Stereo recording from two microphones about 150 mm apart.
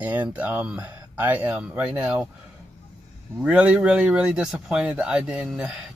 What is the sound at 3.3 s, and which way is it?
Speech, 5° right (ahead or behind).